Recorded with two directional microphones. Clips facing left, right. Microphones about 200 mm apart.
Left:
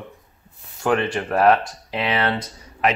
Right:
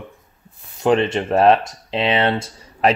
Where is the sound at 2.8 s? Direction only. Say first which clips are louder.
Right 4 dB; 35° right (ahead or behind).